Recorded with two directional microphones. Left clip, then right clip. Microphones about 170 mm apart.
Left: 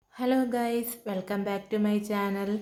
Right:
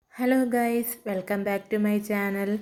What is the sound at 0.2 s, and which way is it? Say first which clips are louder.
A woman's voice: right 3 dB; 20° right (ahead or behind).